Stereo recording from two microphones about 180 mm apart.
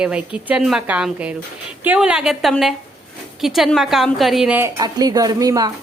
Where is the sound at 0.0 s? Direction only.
5° right (ahead or behind).